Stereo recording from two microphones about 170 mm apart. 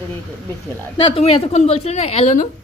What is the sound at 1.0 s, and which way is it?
A woman's voice, 35° left (ahead or behind).